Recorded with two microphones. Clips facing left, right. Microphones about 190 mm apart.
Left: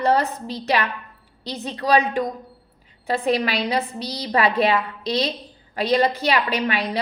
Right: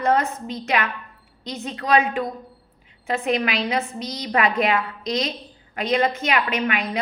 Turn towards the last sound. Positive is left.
turn(degrees=35)  # may be behind; listen again after turning